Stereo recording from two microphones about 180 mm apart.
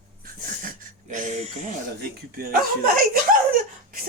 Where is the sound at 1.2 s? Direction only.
40° right (ahead or behind).